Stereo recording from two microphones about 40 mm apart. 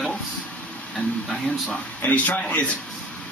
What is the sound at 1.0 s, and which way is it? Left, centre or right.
A man's voice, left.